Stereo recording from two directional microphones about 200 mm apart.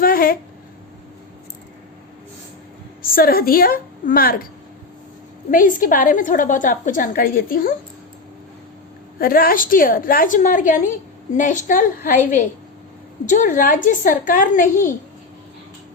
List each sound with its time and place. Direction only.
0.0 s a sound: 45° left (ahead or behind)
3.0 s a woman's voice: 45° left (ahead or behind)
5.5 s a woman's voice: 45° left (ahead or behind)
9.1 s a woman's voice: 45° left (ahead or behind)